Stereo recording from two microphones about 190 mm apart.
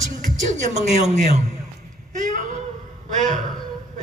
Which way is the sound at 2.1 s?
40° right (ahead or behind).